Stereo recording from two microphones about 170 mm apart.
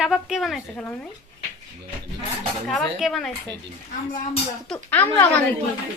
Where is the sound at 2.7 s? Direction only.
Centre (ahead or behind).